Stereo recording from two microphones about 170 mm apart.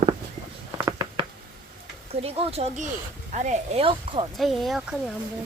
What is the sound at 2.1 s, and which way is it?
Speech, 35° right (ahead or behind).